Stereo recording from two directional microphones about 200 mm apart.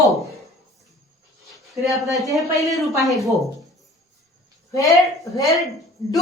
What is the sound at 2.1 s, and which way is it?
Speech, 15° right (ahead or behind).